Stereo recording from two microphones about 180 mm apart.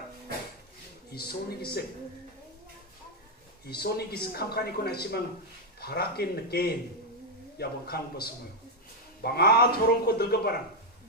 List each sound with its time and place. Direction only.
1.1 s a man's voice: 60° left (ahead or behind)
3.6 s a man's voice: 60° left (ahead or behind)